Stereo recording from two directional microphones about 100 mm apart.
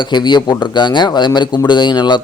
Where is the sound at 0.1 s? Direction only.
45° left (ahead or behind).